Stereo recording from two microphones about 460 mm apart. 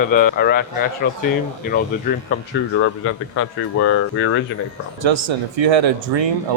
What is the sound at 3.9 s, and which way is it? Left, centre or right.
Speech, left.